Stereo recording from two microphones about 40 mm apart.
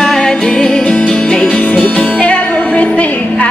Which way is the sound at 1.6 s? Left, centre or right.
Left.